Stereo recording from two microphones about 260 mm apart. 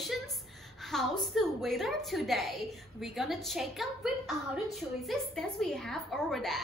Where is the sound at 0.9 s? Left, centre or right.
Centre.